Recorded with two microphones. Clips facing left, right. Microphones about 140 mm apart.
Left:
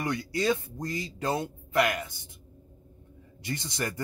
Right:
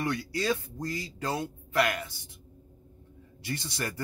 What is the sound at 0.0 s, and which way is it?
Speech, 15° left (ahead or behind).